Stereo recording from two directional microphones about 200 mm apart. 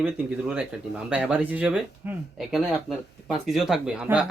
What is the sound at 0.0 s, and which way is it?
Speech, 5° right (ahead or behind).